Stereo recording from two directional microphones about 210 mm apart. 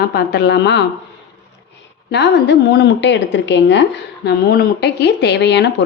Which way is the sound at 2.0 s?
55° left (ahead or behind).